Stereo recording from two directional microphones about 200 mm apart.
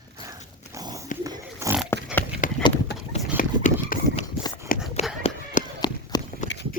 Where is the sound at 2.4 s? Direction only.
40° left (ahead or behind).